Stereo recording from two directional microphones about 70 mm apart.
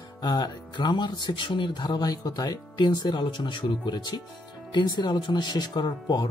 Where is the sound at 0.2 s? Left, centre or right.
Left.